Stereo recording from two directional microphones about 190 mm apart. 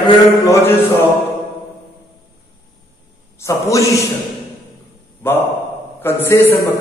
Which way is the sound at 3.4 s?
15° left (ahead or behind).